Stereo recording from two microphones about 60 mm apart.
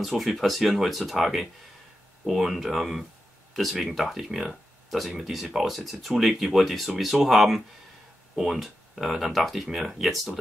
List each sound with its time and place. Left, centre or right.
0.0 s speech: centre